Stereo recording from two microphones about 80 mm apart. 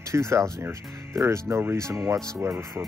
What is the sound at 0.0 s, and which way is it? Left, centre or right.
Speech, right.